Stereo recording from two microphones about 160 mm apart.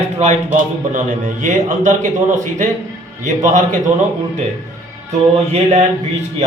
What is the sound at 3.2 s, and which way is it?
Speech, 50° right (ahead or behind).